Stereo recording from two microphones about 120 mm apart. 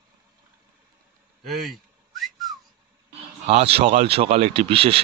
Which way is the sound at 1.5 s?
Centre (ahead or behind).